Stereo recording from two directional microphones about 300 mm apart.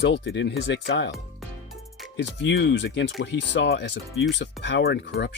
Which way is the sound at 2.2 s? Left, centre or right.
Left.